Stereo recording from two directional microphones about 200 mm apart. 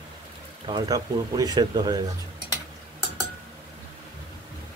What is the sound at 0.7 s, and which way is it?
Speech, 20° right (ahead or behind).